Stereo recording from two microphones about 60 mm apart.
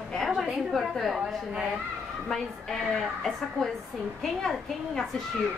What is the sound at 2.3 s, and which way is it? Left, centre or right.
A woman's voice, centre.